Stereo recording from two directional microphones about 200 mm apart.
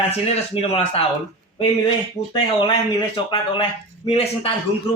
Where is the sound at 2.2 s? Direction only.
35° left (ahead or behind).